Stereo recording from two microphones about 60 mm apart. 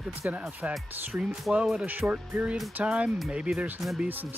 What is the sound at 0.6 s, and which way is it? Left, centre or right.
Speech, right.